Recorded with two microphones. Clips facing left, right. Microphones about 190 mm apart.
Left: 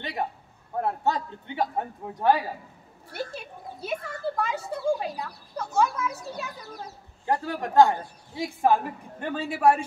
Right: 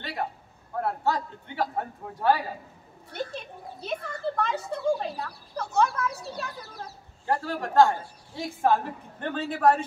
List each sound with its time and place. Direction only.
0.0 s a man's voice: 20° left (ahead or behind)
3.1 s speech: 5° left (ahead or behind)